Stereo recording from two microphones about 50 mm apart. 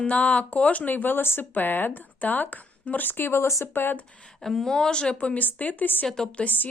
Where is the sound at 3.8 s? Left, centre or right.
Left.